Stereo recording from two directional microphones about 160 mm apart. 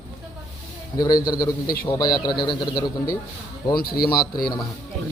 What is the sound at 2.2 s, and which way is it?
Speech, 30° left (ahead or behind).